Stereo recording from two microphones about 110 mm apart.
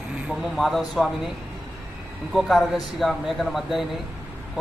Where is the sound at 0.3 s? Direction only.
Centre (ahead or behind).